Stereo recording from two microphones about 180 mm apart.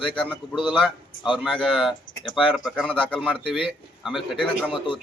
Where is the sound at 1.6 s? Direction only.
Centre (ahead or behind).